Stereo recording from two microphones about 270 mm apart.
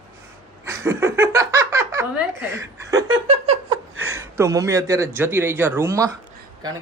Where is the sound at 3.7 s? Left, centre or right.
Right.